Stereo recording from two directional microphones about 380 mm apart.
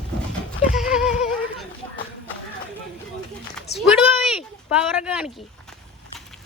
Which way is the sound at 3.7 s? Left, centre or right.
Centre.